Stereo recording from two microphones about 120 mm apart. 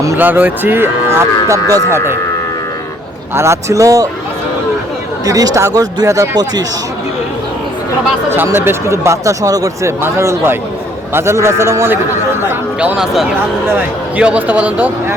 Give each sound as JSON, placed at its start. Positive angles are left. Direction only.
{"t": 0.2, "sound": "speech", "side_deg": -15}
{"t": 3.3, "sound": "speech", "side_deg": -25}
{"t": 5.2, "sound": "speech", "side_deg": -30}
{"t": 8.4, "sound": "a man's voice", "side_deg": -20}